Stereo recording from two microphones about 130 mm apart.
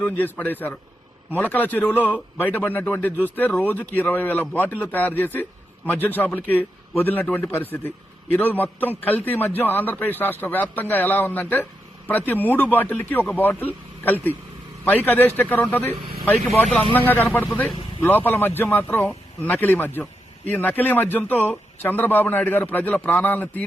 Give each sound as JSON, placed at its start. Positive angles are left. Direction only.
{"t": 0.0, "sound": "a man's voice", "side_deg": 15}
{"t": 16.3, "sound": "speech", "side_deg": 0}
{"t": 16.9, "sound": "a man's voice", "side_deg": 15}